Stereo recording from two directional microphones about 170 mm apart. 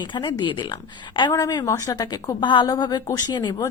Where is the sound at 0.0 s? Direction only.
30° left (ahead or behind).